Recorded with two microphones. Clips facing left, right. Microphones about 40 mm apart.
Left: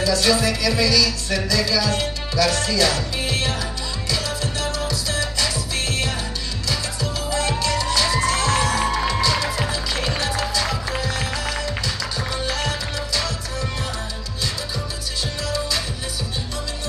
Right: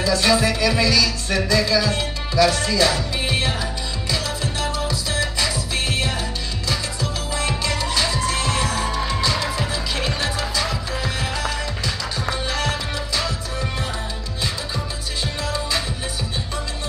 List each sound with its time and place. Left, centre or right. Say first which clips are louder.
0.0 s music: right 1 dB; right
7.3 s music: left 2 dB; centre
9.3 s music: left 1 dB; centre
15.4 s music: even; right